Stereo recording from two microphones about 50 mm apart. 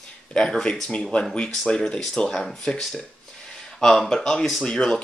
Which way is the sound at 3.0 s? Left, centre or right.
Centre.